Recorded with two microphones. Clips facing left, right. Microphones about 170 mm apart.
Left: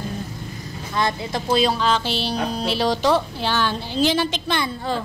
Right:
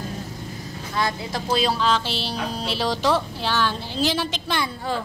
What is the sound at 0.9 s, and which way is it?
A woman's voice, 5° right (ahead or behind).